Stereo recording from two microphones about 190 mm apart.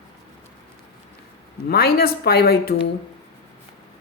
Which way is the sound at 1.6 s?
55° left (ahead or behind).